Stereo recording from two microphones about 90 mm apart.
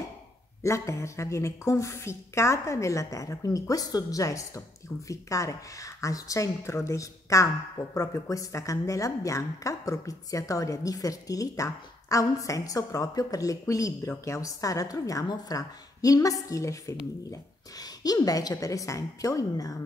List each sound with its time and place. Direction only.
0.6 s a woman's voice: 35° left (ahead or behind)